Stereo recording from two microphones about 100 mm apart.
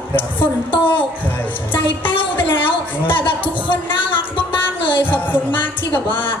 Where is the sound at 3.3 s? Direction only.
55° left (ahead or behind).